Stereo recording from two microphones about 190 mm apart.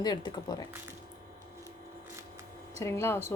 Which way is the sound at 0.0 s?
20° left (ahead or behind).